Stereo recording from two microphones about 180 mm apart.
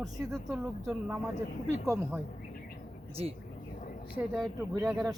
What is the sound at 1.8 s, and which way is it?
Speech, 15° right (ahead or behind).